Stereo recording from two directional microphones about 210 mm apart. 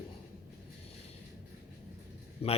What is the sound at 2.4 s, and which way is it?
Speech, 30° left (ahead or behind).